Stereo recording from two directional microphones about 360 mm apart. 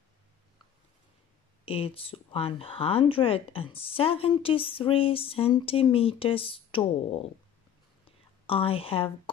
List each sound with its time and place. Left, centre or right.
1.7 s speech: centre
8.5 s speech: centre